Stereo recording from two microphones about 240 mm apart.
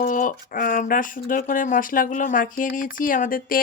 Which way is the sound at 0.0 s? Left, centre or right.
Left.